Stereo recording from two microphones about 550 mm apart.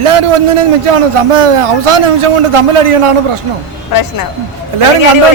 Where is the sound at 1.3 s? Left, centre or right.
Right.